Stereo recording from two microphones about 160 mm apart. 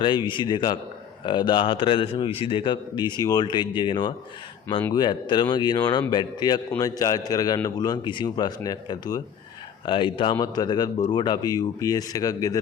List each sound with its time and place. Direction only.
0.0 s a man's voice: 30° left (ahead or behind)